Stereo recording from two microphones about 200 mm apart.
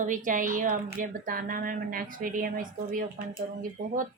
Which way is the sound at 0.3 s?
40° right (ahead or behind).